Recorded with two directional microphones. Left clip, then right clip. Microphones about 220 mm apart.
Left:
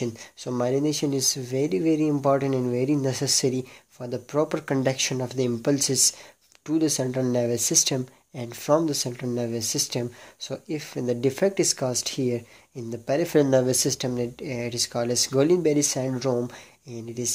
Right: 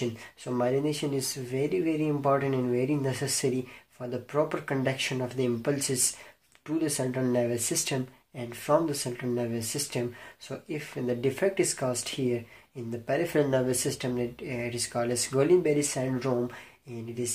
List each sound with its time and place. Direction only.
0.0 s speech: 45° left (ahead or behind)